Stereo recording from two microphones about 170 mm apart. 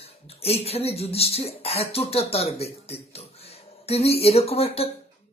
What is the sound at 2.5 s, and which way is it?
Speech, 35° left (ahead or behind).